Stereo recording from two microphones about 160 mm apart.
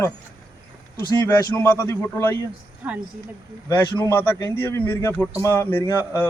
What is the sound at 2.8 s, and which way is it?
Speech, 10° right (ahead or behind).